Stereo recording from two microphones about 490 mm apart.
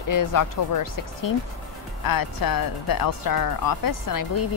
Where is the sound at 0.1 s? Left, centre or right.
Left.